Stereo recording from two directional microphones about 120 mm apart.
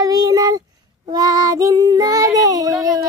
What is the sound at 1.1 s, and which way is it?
Child singing, 30° right (ahead or behind).